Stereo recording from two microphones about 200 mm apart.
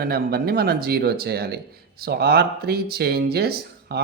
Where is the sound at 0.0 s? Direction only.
50° right (ahead or behind).